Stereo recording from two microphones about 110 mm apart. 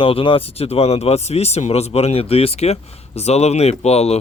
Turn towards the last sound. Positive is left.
turn(degrees=75)  # may be behind; listen again after turning